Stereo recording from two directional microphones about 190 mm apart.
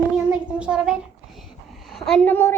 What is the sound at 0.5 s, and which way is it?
A child's voice, 5° right (ahead or behind).